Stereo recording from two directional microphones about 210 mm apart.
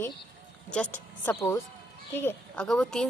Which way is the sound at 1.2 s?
10° left (ahead or behind).